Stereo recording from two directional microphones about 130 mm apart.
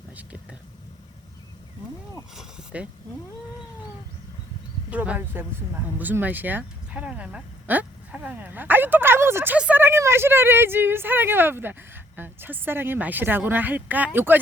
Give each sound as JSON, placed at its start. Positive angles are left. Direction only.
{"t": 2.3, "sound": "speech", "side_deg": -5}
{"t": 4.9, "sound": "a woman's voice", "side_deg": -10}